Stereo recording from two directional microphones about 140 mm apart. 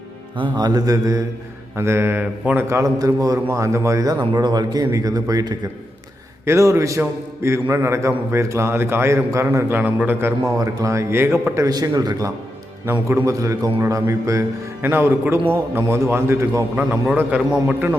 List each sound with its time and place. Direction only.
0.3 s a man's voice: 35° right (ahead or behind); by 2.6 s 10° right (ahead or behind)
2.6 s a man's voice: 25° right (ahead or behind)